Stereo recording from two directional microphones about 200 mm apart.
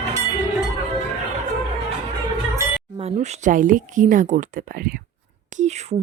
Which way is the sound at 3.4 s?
40° right (ahead or behind).